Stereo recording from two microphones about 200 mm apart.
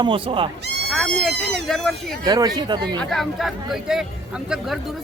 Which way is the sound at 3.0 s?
Centre (ahead or behind).